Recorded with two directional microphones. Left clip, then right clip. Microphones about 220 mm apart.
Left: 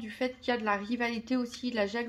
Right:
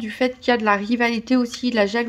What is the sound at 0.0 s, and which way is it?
Speech, 45° right (ahead or behind).